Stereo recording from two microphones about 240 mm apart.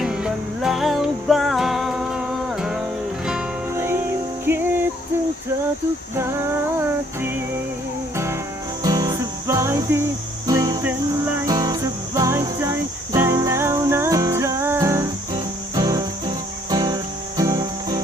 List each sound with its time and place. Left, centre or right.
0.0 s music: centre
8.1 s music: centre